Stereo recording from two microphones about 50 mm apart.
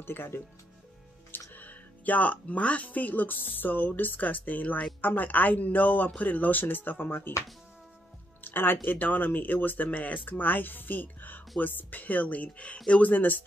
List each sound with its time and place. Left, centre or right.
0.0 s speech: left
1.5 s speech: left
8.5 s speech: left